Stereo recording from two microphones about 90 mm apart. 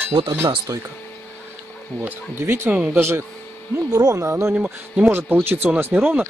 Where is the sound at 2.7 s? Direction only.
10° right (ahead or behind).